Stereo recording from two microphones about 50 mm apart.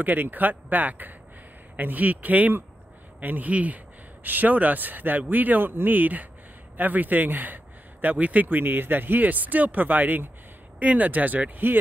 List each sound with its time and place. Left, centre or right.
0.0 s speech: right